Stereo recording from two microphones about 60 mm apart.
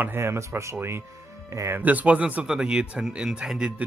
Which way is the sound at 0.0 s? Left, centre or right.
Right.